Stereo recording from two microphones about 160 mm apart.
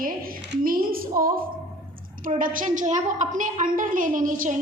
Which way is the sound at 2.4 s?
60° right (ahead or behind).